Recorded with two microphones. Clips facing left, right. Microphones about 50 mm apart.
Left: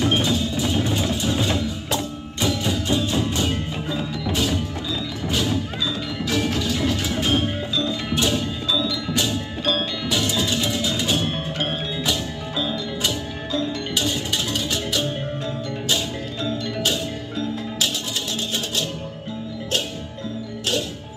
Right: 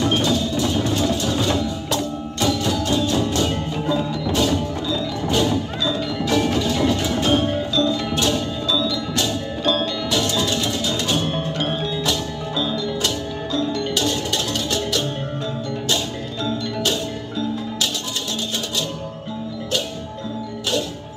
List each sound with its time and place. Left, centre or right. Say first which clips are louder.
0.0 s music: right 1 dB; left